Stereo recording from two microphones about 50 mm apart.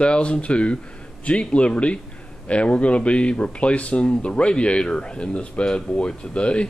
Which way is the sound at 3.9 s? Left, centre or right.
Centre.